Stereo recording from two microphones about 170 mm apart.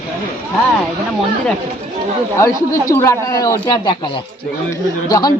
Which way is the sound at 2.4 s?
15° left (ahead or behind).